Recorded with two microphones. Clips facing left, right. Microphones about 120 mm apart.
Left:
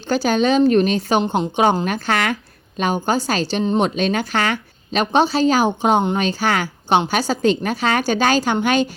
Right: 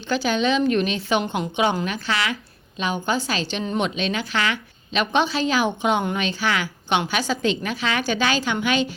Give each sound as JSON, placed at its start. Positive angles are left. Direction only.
{"t": 0.1, "sound": "a woman's voice", "side_deg": 40}